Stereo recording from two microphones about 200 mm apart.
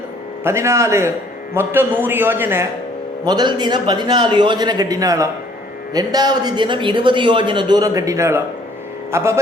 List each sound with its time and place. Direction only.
0.4 s a man's voice: 15° right (ahead or behind)
3.2 s a man's voice: 20° right (ahead or behind)